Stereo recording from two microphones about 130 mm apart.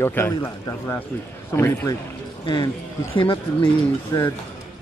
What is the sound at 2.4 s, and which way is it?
Speech, 35° left (ahead or behind).